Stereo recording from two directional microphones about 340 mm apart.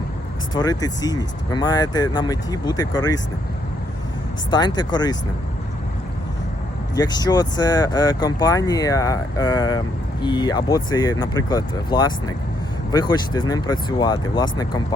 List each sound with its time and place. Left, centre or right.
0.5 s speech: centre
4.5 s speech: centre
6.9 s speech: centre